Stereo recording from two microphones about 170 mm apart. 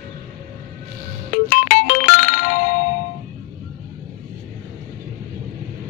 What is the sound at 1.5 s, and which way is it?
Music, 50° left (ahead or behind).